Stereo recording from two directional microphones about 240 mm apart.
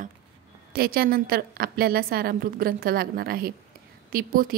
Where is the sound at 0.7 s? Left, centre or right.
Right.